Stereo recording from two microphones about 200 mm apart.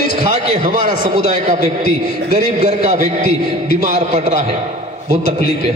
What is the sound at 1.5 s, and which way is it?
Speech, 50° left (ahead or behind).